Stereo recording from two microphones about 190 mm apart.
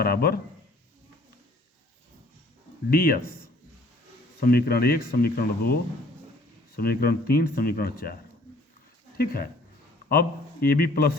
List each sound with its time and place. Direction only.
0.0 s speech: 55° left (ahead or behind)
2.9 s speech: 50° left (ahead or behind)